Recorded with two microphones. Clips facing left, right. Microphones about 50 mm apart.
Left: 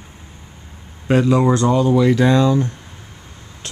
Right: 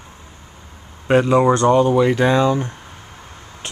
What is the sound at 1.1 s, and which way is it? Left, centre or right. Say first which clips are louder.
Speech: right 1 dB; right.